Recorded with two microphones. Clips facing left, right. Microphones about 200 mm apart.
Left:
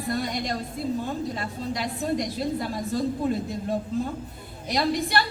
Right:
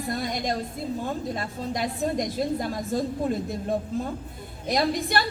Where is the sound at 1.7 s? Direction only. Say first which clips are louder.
Right 1 dB; 50° right (ahead or behind).